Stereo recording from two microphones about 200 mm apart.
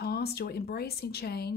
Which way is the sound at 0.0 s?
50° left (ahead or behind).